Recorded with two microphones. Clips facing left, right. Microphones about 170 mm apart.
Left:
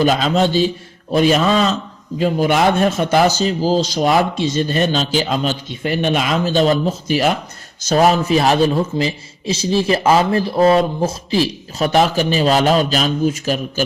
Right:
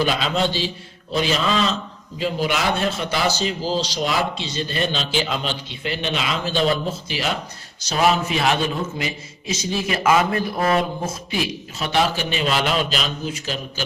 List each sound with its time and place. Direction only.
0.0 s a man's voice: 45° left (ahead or behind)